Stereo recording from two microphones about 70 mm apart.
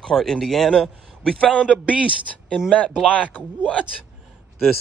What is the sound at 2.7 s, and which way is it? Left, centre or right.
Speech, left.